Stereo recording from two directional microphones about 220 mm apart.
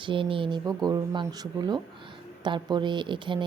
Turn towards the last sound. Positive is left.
turn(degrees=-20)  # may be behind; listen again after turning